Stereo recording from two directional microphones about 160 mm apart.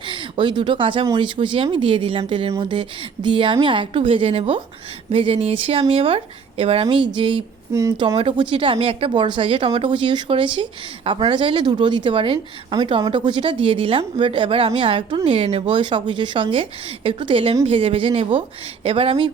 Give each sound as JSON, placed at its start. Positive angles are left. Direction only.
{"t": 0.0, "sound": "speech", "side_deg": -30}
{"t": 7.7, "sound": "a woman's voice", "side_deg": -20}
{"t": 7.9, "sound": "speech", "side_deg": -35}